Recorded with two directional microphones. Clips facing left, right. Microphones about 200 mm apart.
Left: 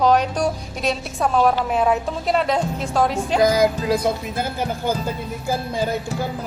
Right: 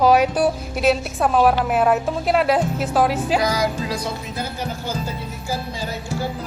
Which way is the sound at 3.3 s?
50° left (ahead or behind).